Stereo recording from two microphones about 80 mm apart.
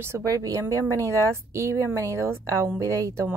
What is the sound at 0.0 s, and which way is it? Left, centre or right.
A woman's voice, right.